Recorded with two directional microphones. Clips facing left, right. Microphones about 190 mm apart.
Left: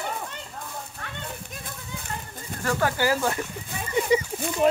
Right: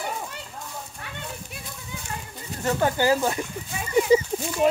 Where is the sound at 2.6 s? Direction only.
20° right (ahead or behind).